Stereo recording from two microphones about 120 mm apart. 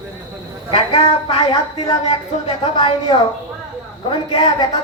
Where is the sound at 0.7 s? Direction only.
50° left (ahead or behind).